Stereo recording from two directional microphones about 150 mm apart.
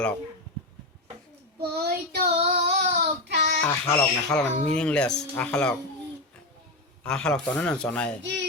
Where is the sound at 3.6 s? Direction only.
10° left (ahead or behind).